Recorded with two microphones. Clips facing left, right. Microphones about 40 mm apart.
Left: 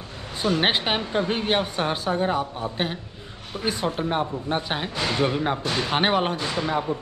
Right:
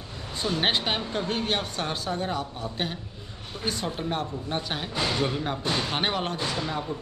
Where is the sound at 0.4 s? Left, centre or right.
Centre.